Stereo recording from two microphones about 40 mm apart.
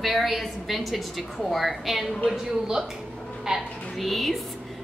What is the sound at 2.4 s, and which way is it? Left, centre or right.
A woman's voice, centre.